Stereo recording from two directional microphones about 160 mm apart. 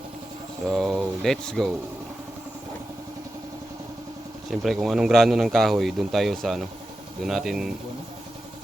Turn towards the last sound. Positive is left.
turn(degrees=0)  # may be behind; listen again after turning